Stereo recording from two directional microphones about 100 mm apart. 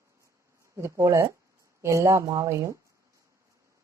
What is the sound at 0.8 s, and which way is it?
A woman's voice, 30° right (ahead or behind).